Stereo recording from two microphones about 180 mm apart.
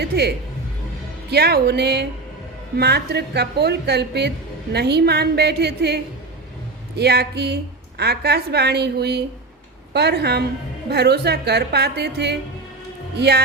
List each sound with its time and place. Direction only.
0.0 s a woman's voice: 65° right (ahead or behind)